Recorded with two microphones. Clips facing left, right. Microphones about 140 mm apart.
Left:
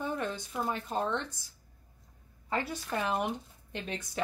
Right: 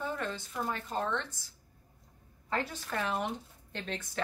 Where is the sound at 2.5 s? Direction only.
15° left (ahead or behind).